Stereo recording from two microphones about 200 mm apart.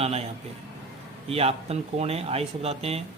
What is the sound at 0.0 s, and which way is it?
Speech, 30° right (ahead or behind).